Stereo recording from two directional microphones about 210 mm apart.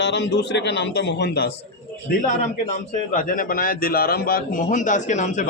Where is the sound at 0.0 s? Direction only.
55° left (ahead or behind).